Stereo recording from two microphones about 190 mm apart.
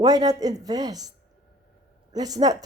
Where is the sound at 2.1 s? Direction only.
20° right (ahead or behind).